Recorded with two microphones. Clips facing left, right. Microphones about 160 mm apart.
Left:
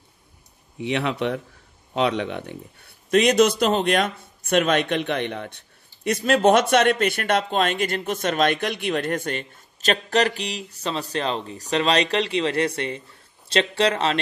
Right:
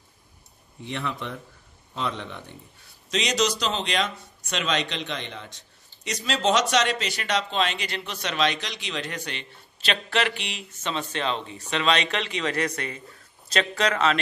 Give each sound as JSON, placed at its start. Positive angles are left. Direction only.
{"t": 0.7, "sound": "a man's voice", "side_deg": 70}